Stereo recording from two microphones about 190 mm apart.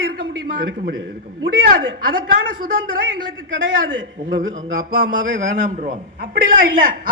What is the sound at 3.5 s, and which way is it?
Speech, 80° right.